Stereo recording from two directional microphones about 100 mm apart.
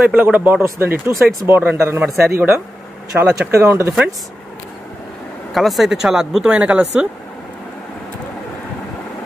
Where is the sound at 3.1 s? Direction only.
25° right (ahead or behind).